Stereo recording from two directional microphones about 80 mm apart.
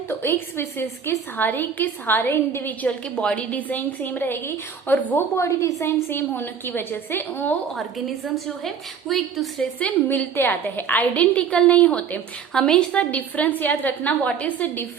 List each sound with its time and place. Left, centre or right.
0.1 s a woman's voice: left
5.4 s a woman's voice: left
7.8 s a woman's voice: centre
9.8 s a woman's voice: centre
10.3 s a woman's voice: left